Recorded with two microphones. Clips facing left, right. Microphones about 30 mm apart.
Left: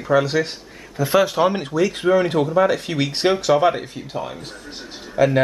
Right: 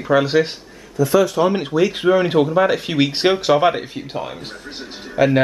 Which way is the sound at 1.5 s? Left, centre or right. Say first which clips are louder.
Right 3 dB; centre.